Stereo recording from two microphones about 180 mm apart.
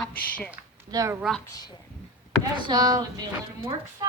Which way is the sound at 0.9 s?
20° right (ahead or behind).